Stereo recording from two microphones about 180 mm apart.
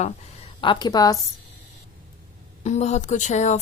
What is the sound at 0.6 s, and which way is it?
Speech, 25° left (ahead or behind).